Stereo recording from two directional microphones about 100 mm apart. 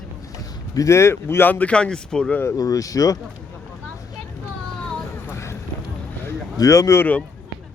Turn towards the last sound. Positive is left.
turn(degrees=20)  # may be behind; listen again after turning